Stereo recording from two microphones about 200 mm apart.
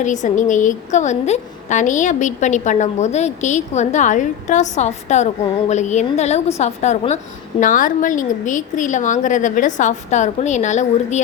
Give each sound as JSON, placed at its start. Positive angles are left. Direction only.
{"t": 0.0, "sound": "a woman's voice", "side_deg": 40}